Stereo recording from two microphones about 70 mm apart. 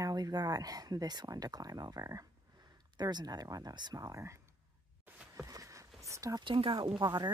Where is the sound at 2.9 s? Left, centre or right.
Right.